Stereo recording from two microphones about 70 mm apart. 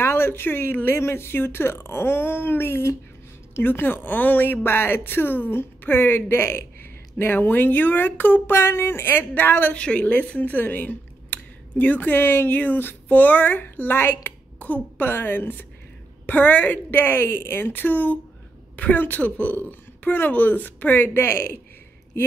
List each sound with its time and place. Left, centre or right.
0.0 s speech: left